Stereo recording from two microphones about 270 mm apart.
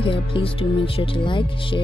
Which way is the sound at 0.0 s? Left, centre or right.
Centre.